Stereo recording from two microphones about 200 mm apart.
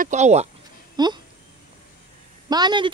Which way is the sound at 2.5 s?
20° right (ahead or behind).